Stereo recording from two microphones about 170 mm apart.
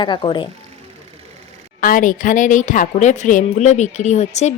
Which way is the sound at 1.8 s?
55° left (ahead or behind).